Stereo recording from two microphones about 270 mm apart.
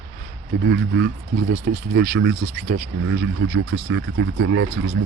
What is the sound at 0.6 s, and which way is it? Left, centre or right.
Speech, right.